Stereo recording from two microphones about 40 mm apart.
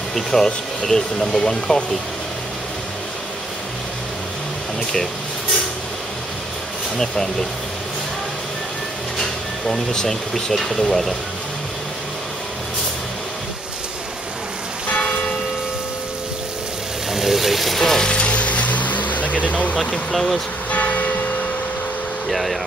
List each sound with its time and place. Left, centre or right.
0.1 s speech: centre
9.9 s speech: centre
17.1 s vehicle: centre
17.7 s a sound: centre
18.0 s music: left
20.1 s speech: centre
20.7 s church bell: left
22.3 s speech: centre